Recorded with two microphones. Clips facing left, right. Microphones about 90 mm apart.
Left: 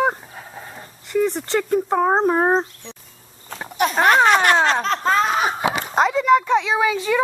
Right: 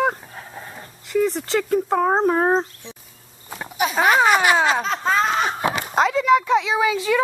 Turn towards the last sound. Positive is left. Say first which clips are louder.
# even
turn(degrees=5)  # may be behind; listen again after turning